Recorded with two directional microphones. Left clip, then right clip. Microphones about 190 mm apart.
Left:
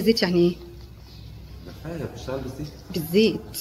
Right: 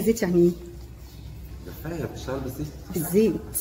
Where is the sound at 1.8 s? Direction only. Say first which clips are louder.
Right 1 dB; 45° left (ahead or behind).